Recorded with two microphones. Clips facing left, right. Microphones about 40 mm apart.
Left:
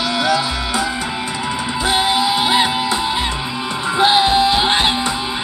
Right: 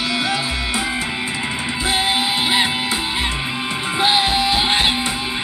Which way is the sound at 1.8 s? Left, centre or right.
Right.